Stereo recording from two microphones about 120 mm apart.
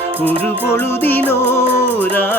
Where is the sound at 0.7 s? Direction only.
20° left (ahead or behind).